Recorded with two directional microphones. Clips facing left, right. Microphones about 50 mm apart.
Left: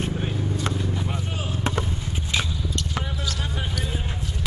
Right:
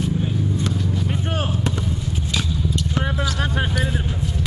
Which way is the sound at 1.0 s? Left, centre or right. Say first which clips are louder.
Right 6 dB; right.